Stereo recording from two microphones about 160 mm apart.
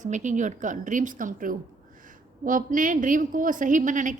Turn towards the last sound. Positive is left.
turn(degrees=-55)  # may be behind; listen again after turning